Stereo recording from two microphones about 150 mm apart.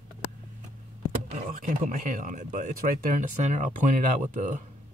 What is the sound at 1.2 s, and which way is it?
Speech, 60° right (ahead or behind).